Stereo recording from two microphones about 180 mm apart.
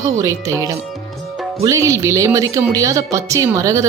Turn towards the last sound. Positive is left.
turn(degrees=-15)  # may be behind; listen again after turning